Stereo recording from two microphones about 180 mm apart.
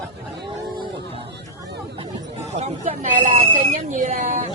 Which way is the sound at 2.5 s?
40° right (ahead or behind).